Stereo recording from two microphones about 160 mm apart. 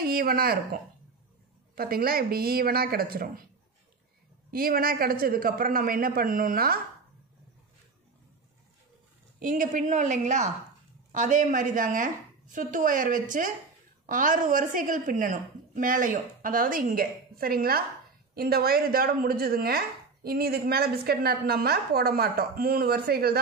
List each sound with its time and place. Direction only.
0.0 s speech: 65° right (ahead or behind)
1.8 s a woman's voice: 70° right (ahead or behind)
4.5 s a woman's voice: 65° right (ahead or behind)
9.4 s a woman's voice: 55° right (ahead or behind); by 23.4 s 75° right (ahead or behind)